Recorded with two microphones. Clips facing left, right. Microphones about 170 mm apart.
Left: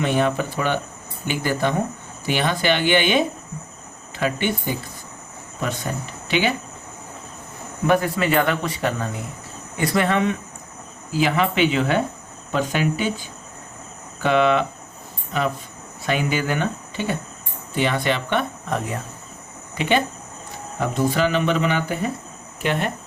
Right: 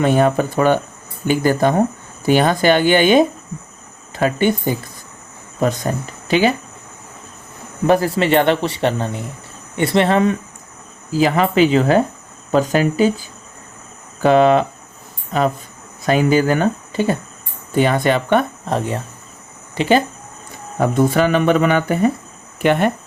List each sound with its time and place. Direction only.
0.0 s speech: 45° right (ahead or behind)
7.9 s speech: 35° right (ahead or behind)
16.0 s speech: 40° right (ahead or behind)
20.7 s speech: 50° right (ahead or behind)